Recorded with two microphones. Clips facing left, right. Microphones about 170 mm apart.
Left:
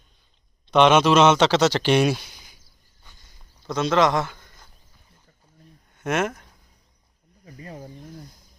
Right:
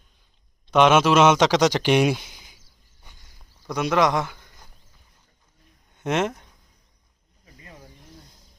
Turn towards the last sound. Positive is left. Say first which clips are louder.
# left 8 dB
turn(degrees=35)  # may be behind; listen again after turning